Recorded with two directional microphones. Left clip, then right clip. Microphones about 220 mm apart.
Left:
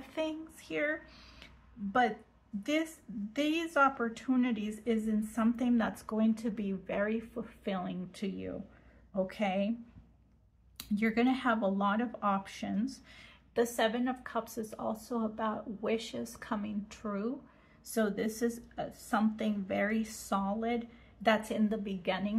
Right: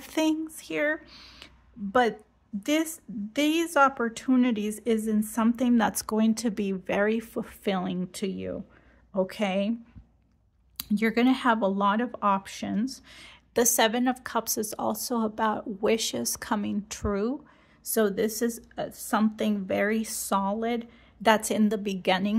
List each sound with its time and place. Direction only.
0.0 s speech: 55° right (ahead or behind)
10.8 s speech: 50° right (ahead or behind)